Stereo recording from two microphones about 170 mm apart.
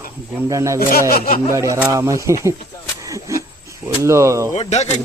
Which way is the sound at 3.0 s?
20° right (ahead or behind).